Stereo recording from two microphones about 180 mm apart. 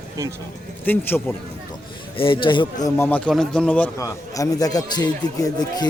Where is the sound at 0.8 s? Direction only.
10° left (ahead or behind).